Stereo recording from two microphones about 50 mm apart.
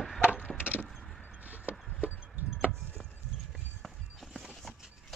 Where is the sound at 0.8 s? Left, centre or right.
Centre.